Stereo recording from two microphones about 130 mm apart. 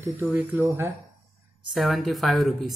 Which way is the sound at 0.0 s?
15° right (ahead or behind).